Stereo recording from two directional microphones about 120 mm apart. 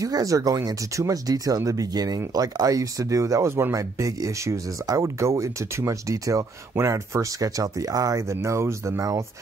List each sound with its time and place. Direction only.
0.0 s speech: 30° right (ahead or behind)